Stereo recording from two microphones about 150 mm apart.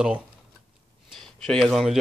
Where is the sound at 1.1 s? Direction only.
Centre (ahead or behind).